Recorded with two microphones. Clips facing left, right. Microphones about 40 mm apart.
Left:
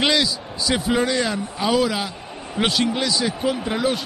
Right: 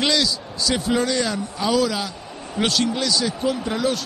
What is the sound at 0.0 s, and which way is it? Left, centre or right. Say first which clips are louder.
A man's voice: left 1 dB; centre.